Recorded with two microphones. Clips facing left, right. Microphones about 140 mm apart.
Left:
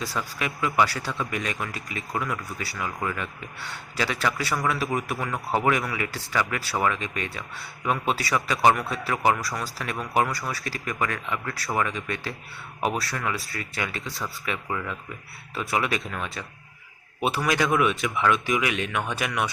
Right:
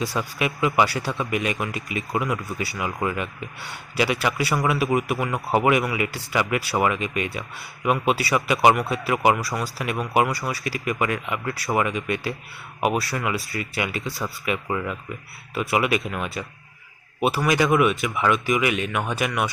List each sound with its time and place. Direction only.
0.0 s a man's voice: 20° right (ahead or behind); by 19.5 s centre (ahead or behind)